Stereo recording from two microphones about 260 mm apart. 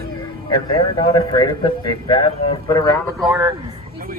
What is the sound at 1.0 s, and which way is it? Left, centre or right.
Speech, centre.